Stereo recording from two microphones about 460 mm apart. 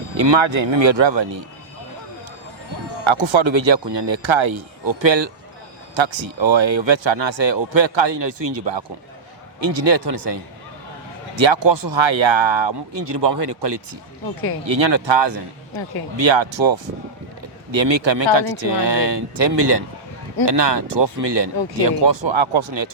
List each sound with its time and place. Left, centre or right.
0.2 s speech: right
3.0 s speech: right
4.9 s speech: right
11.3 s speech: right